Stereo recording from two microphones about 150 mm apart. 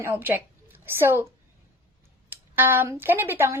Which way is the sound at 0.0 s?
15° right (ahead or behind).